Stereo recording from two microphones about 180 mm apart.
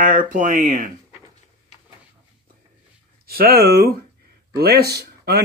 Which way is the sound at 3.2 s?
60° right (ahead or behind).